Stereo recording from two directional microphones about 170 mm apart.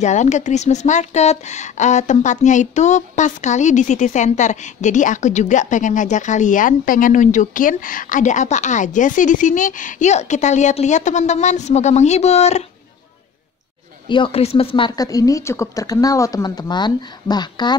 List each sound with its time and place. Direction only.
0.0 s a woman's voice: 45° left (ahead or behind)
14.0 s speech: 30° left (ahead or behind)